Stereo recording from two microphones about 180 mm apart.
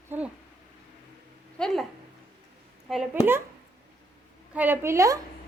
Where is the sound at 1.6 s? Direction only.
5° left (ahead or behind).